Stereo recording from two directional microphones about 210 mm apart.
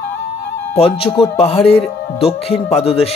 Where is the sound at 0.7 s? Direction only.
25° left (ahead or behind).